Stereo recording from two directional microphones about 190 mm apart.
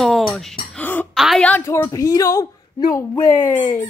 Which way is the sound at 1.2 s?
Centre (ahead or behind).